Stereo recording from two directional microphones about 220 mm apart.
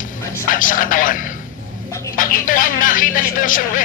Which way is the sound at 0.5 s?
40° left (ahead or behind).